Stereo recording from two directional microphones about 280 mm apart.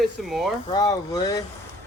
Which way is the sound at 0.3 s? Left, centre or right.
Centre.